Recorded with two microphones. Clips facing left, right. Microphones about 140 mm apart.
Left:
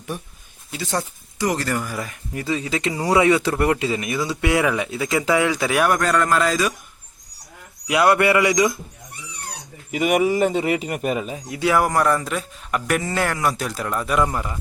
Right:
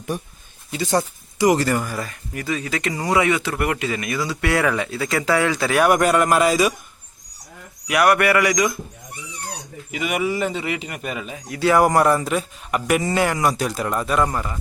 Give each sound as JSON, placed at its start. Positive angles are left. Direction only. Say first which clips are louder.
{"t": 0.7, "sound": "speech", "louder": "right 5 dB", "side_deg": 0}
{"t": 0.9, "sound": "speech", "louder": "right 5 dB", "side_deg": -15}
{"t": 2.3, "sound": "speech", "louder": "left 1 dB", "side_deg": 25}
{"t": 2.9, "sound": "speech", "louder": "left 2 dB", "side_deg": 10}
{"t": 3.2, "sound": "speech", "louder": "left 4 dB", "side_deg": 30}
{"t": 5.9, "sound": "speech", "louder": "right 3 dB", "side_deg": -15}
{"t": 7.9, "sound": "speech", "louder": "even", "side_deg": 20}
{"t": 9.9, "sound": "speech", "louder": "left 5 dB", "side_deg": 45}
{"t": 11.6, "sound": "speech", "louder": "right 3 dB", "side_deg": 5}
{"t": 12.0, "sound": "speech", "louder": "right 2 dB", "side_deg": -25}
{"t": 12.3, "sound": "speech", "louder": "right 2 dB", "side_deg": -10}
{"t": 13.6, "sound": "speech", "louder": "right 2 dB", "side_deg": -5}
{"t": 14.1, "sound": "speech", "louder": "left 2 dB", "side_deg": 10}